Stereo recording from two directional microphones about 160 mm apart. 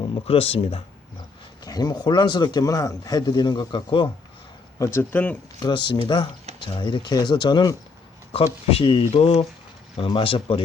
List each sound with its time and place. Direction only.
0.1 s speech: 35° left (ahead or behind)
1.6 s a man's voice: 25° left (ahead or behind)
4.8 s speech: 15° left (ahead or behind)
5.5 s a man's voice: 25° left (ahead or behind)